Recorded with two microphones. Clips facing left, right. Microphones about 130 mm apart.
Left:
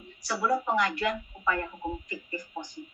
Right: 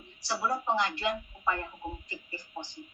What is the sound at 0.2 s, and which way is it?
A woman's voice, 30° right (ahead or behind).